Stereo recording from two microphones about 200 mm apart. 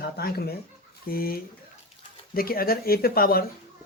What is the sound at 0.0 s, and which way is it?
Speech, 50° left (ahead or behind).